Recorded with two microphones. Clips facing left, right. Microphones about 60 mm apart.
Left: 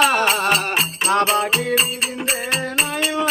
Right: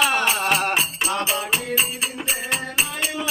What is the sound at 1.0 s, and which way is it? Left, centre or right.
Music, left.